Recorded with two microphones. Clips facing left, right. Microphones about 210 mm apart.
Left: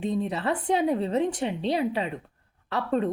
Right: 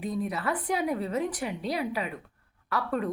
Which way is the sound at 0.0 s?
25° left (ahead or behind).